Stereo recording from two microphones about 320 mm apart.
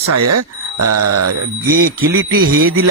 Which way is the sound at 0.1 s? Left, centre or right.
Right.